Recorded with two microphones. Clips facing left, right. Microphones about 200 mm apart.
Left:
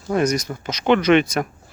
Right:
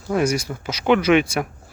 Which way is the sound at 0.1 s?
10° right (ahead or behind).